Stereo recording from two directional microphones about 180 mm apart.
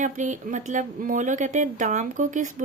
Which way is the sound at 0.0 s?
45° right (ahead or behind).